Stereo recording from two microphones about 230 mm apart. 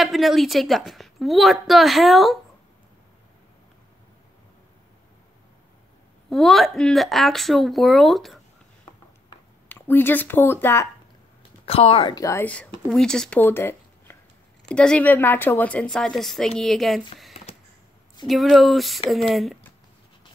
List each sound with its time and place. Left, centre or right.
0.0 s a woman's voice: centre
6.3 s a woman's voice: centre
11.6 s a woman's voice: left; by 17.0 s centre
18.2 s a woman's voice: centre